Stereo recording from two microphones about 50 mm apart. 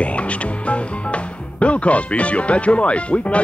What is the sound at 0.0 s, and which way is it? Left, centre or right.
Music, left.